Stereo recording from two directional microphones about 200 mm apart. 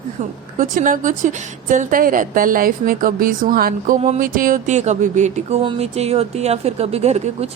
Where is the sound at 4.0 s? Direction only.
40° right (ahead or behind).